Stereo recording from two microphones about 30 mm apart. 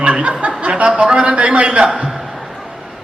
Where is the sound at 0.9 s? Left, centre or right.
Right.